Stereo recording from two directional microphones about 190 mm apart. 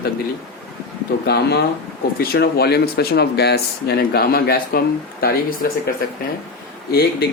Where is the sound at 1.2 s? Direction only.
60° left (ahead or behind).